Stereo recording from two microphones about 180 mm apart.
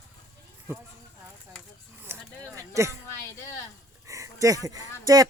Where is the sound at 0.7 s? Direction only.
15° right (ahead or behind).